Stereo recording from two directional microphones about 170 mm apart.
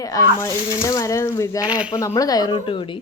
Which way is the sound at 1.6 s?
10° right (ahead or behind).